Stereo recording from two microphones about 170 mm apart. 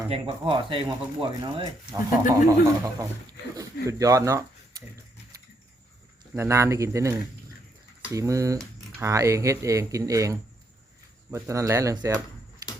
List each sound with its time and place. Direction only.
0.3 s speech: 30° right (ahead or behind)
6.3 s speech: 15° right (ahead or behind)